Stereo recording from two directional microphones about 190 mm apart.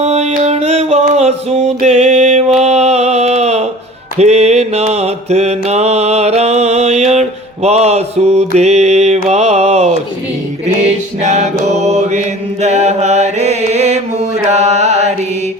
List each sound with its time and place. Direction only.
0.0 s music: 35° right (ahead or behind)
4.2 s mantra: 35° right (ahead or behind)
11.2 s mantra: 35° right (ahead or behind)